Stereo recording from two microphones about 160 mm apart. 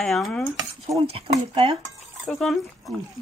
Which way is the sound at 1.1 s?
40° right (ahead or behind).